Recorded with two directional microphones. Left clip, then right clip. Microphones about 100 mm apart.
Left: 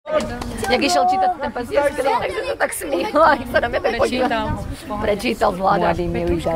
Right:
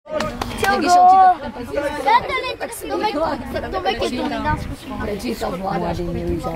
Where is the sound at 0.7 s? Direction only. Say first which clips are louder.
Right 5 dB; 20° left (ahead or behind).